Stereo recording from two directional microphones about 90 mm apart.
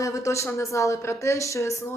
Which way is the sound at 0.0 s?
35° left (ahead or behind).